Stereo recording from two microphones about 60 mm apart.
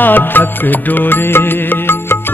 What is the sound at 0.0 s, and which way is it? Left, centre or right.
Music, left.